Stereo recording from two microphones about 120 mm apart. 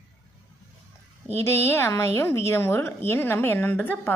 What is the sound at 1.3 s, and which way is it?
A woman's voice, 20° left (ahead or behind).